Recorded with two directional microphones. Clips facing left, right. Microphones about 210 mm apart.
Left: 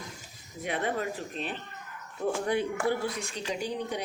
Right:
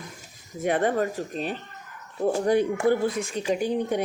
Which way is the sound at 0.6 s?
50° right (ahead or behind).